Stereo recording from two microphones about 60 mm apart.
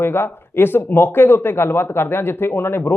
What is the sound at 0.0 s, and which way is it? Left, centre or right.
Speech, left.